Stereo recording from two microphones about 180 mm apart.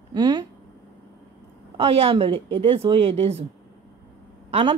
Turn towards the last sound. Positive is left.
turn(degrees=-30)  # may be behind; listen again after turning